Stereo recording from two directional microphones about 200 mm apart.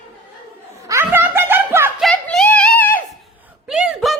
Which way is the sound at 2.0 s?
Centre (ahead or behind).